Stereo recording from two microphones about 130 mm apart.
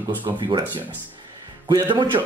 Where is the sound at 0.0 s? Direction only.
40° right (ahead or behind).